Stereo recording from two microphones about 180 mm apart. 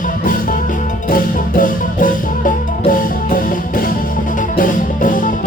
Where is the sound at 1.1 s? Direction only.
50° left (ahead or behind).